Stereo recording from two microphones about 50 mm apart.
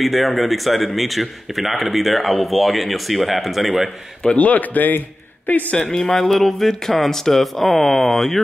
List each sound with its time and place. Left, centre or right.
0.0 s speech: centre
4.2 s a man's voice: left
4.5 s speech: left
5.9 s speech: centre